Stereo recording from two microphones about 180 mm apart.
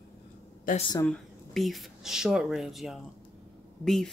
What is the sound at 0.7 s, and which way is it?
Speech, 50° left (ahead or behind).